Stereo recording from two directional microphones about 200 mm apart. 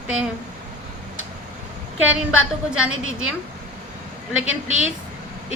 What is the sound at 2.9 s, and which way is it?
Speech, 90° right.